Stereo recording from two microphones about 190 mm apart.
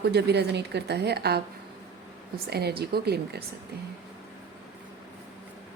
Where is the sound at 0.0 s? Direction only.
60° right (ahead or behind).